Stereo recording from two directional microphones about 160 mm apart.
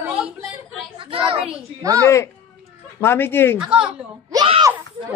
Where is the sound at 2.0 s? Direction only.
15° left (ahead or behind).